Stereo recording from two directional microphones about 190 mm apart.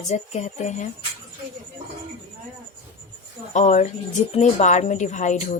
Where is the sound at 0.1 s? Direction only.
35° left (ahead or behind).